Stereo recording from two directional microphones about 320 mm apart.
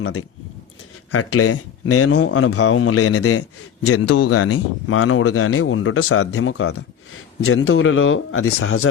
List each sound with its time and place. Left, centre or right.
0.0 s speech: left